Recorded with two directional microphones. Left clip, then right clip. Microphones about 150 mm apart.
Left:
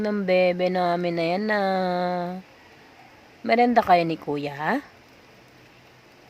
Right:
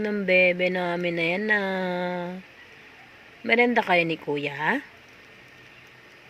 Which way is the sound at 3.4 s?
25° left (ahead or behind).